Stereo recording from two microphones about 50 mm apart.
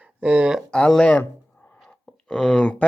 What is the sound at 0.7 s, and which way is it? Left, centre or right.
Speech, centre.